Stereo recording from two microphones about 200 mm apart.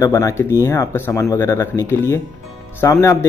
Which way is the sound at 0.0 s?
15° left (ahead or behind).